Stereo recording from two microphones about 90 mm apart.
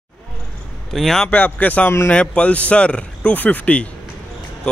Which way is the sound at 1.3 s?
15° left (ahead or behind).